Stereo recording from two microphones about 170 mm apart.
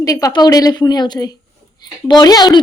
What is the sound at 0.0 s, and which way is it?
A woman's voice, 20° left (ahead or behind).